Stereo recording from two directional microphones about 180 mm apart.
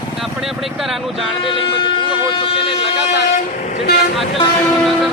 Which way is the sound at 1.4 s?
30° left (ahead or behind).